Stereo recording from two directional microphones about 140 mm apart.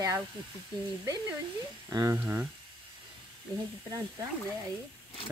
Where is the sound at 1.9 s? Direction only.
25° right (ahead or behind).